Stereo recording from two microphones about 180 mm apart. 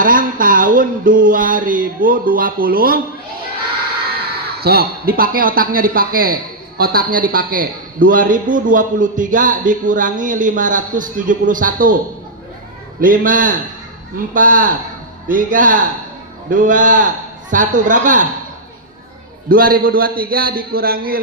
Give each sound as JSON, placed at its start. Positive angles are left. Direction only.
{"t": 0.0, "sound": "a sound", "side_deg": -50}
{"t": 4.6, "sound": "a man's voice", "side_deg": -60}
{"t": 13.0, "sound": "a man's voice", "side_deg": -50}
{"t": 19.5, "sound": "a man's voice", "side_deg": -55}